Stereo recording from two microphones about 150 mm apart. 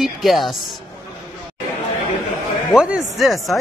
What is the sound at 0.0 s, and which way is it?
Speech, centre (ahead or behind).